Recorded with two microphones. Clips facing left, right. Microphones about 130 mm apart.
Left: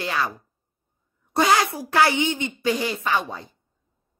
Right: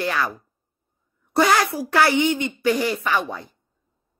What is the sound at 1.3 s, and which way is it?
Speech, 20° left (ahead or behind).